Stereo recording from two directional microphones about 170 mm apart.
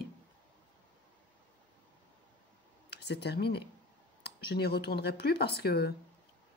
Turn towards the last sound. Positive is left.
turn(degrees=70)  # may be behind; listen again after turning